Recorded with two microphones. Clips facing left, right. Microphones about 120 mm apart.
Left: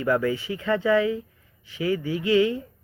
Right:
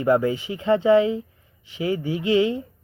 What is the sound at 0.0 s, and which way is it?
Speech, 25° right (ahead or behind).